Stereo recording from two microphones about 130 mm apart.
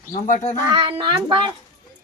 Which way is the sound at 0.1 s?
70° left (ahead or behind).